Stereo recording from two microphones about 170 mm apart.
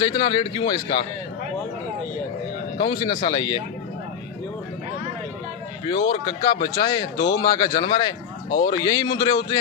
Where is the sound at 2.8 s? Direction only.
25° left (ahead or behind).